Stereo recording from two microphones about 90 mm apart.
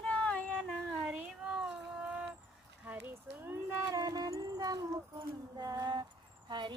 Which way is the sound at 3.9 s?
45° right (ahead or behind).